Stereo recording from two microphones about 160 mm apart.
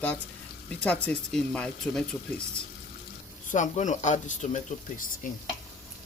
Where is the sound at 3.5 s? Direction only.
50° left (ahead or behind).